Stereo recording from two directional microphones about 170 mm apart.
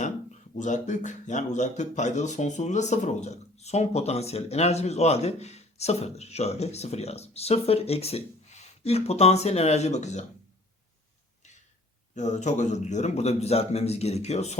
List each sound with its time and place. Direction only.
0.0 s speech: 45° left (ahead or behind)
12.1 s speech: 45° left (ahead or behind)